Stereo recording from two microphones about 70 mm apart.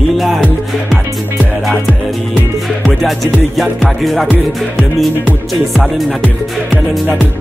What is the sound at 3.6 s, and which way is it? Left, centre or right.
Music, centre.